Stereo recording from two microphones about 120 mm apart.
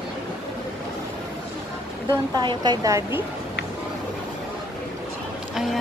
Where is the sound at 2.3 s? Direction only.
35° right (ahead or behind).